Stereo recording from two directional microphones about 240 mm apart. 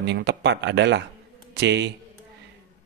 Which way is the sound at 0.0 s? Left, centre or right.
Right.